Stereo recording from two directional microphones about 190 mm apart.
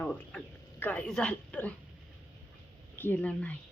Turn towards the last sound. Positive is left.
turn(degrees=10)  # may be behind; listen again after turning